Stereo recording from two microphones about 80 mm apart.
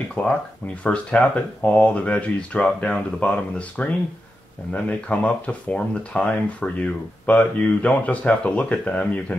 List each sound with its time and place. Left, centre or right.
0.1 s speech: centre